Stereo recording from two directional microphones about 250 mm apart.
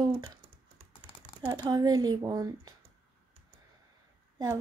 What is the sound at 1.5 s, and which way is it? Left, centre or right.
Speech, centre.